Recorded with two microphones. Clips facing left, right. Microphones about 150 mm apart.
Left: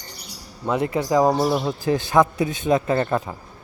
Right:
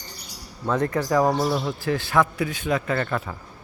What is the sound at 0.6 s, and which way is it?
A man's voice, 15° left (ahead or behind).